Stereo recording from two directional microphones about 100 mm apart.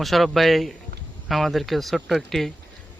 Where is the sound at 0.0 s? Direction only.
Centre (ahead or behind).